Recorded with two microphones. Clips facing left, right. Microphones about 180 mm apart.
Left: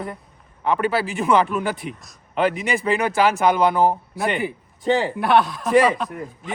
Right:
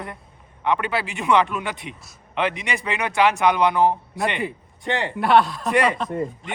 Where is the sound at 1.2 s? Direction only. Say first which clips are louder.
Left 1 dB; centre (ahead or behind).